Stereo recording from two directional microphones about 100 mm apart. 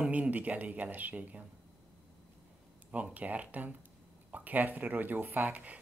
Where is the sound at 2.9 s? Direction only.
15° right (ahead or behind).